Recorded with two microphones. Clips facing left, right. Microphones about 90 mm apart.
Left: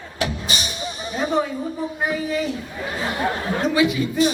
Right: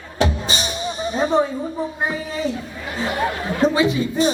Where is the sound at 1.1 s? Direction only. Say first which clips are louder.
Right 3 dB; 30° right (ahead or behind).